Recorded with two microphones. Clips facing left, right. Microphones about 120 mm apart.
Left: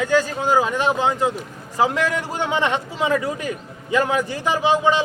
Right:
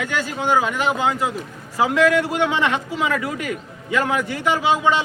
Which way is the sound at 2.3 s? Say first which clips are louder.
Right 1 dB; 30° left (ahead or behind).